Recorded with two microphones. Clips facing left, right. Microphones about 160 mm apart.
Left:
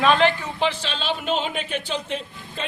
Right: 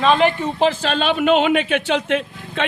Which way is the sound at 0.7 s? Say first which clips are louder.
Right 7 dB; 55° right (ahead or behind).